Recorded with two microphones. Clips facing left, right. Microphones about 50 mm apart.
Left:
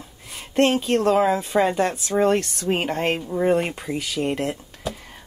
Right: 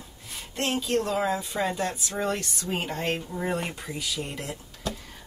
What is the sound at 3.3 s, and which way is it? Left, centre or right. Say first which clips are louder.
Speech: left 9 dB; left.